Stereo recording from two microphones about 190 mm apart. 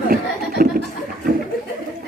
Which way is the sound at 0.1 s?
50° right (ahead or behind).